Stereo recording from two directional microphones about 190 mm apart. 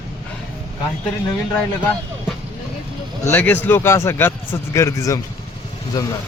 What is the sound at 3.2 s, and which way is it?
A man's voice, 10° left (ahead or behind).